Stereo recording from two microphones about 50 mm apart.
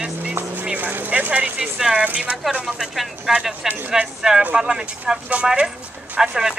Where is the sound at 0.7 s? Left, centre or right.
Right.